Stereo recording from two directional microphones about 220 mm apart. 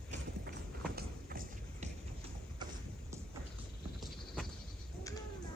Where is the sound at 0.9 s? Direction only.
40° right (ahead or behind).